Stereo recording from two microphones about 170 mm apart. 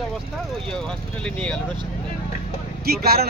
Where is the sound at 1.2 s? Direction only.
5° left (ahead or behind).